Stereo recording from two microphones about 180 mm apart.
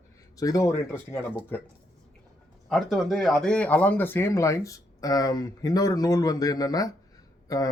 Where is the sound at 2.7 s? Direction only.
Centre (ahead or behind).